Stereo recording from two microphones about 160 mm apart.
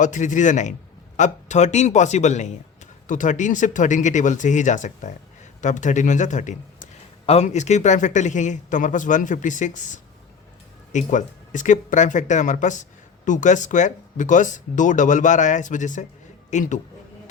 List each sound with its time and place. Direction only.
0.0 s speech: 50° left (ahead or behind)